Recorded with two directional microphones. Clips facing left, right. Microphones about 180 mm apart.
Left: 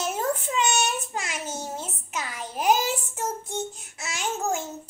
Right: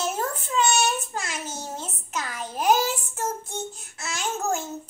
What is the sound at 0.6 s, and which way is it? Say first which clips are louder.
Child singing: right 7 dB; 15° left (ahead or behind).